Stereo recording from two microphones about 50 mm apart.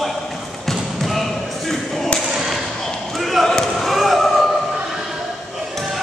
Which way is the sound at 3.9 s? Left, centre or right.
Centre.